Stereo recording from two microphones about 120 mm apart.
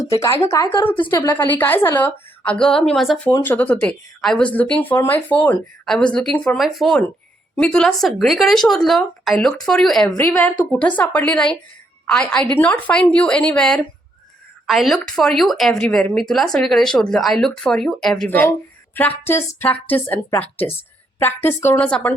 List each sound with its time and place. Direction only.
0.1 s a woman's voice: 25° left (ahead or behind); by 3.2 s centre (ahead or behind)
3.4 s a woman's voice: 15° left (ahead or behind)
18.3 s a woman's voice: 15° left (ahead or behind)
21.8 s a woman's voice: 10° left (ahead or behind)